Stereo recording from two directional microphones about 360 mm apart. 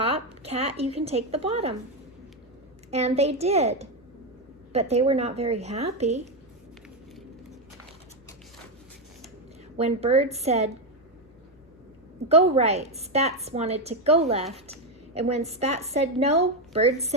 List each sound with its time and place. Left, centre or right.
0.0 s a woman's voice: centre
2.9 s a woman's voice: centre
9.7 s a woman's voice: centre
12.3 s a woman's voice: centre